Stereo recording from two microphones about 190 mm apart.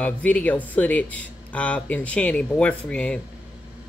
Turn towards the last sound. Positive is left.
turn(degrees=5)  # may be behind; listen again after turning